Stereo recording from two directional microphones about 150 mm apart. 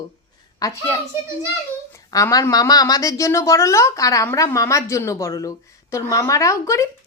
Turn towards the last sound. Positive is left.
turn(degrees=20)  # may be behind; listen again after turning